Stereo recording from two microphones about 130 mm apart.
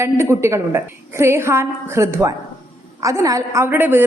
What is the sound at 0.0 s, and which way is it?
A woman's voice, 20° right (ahead or behind).